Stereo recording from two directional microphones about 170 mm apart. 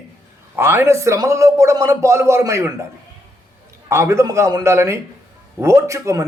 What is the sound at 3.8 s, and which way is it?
A man's voice, 15° right (ahead or behind).